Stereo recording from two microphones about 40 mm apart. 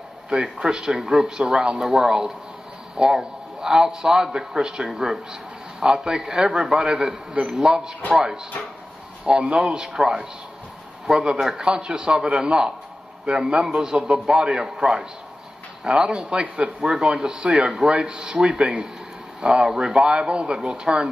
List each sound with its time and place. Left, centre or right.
0.6 s a man's voice: centre
9.2 s a man's voice: right